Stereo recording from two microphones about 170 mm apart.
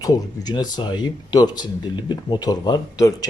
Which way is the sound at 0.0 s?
20° left (ahead or behind).